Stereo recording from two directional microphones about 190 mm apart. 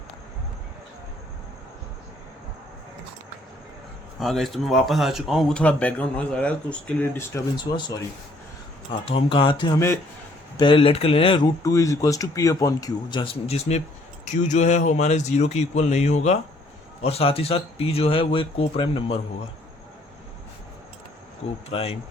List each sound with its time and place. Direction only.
4.2 s speech: centre (ahead or behind)
7.6 s speech: 25° left (ahead or behind)
9.0 s speech: 25° left (ahead or behind)
10.6 s speech: 25° left (ahead or behind)
21.7 s speech: 30° left (ahead or behind)